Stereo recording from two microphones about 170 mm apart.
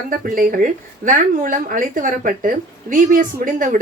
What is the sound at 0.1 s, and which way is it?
A woman's voice, 55° right (ahead or behind).